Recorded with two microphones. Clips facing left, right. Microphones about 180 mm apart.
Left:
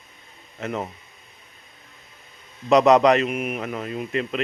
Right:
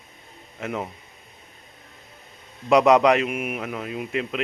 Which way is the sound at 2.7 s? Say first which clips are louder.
Left 1 dB; 10° right (ahead or behind).